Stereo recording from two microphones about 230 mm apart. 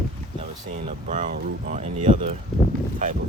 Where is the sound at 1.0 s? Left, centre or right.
Right.